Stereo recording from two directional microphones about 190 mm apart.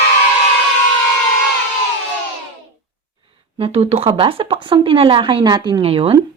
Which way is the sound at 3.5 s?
30° right (ahead or behind).